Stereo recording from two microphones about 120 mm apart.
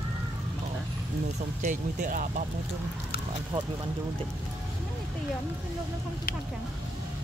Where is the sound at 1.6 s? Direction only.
90° right.